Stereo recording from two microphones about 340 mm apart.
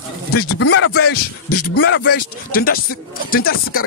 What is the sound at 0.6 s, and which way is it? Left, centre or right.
A man's voice, left.